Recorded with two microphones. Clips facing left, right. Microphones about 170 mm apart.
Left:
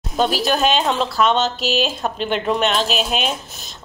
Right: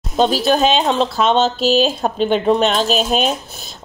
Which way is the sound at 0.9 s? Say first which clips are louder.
Right 2 dB; 30° right (ahead or behind).